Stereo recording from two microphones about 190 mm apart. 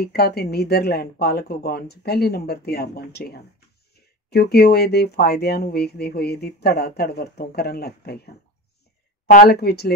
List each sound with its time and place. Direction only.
0.0 s speech: 55° left (ahead or behind)
9.3 s speech: 50° left (ahead or behind)